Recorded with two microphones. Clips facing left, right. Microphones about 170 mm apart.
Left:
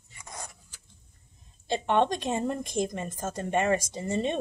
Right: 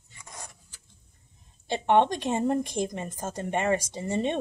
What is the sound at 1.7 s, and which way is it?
Speech, 15° right (ahead or behind).